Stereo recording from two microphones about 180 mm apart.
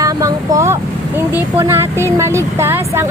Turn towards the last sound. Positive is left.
turn(degrees=-15)  # may be behind; listen again after turning